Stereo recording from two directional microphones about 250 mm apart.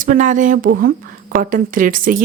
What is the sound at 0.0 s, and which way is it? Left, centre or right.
Speech, right.